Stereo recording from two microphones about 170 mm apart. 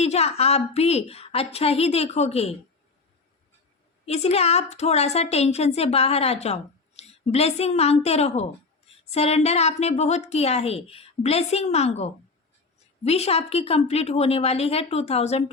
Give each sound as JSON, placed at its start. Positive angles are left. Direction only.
{"t": 0.0, "sound": "a woman's voice", "side_deg": 40}
{"t": 4.0, "sound": "a woman's voice", "side_deg": 40}